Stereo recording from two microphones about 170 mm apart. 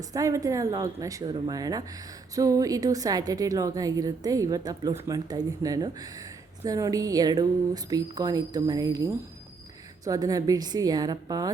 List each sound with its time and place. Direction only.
0.1 s a woman's voice: 20° right (ahead or behind)